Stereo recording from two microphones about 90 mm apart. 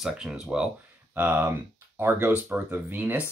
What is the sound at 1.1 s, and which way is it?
Speech, 25° right (ahead or behind).